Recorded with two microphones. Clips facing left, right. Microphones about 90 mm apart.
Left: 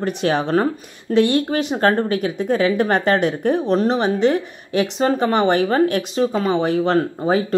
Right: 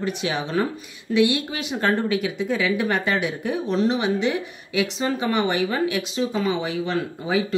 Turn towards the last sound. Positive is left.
turn(degrees=45)  # may be behind; listen again after turning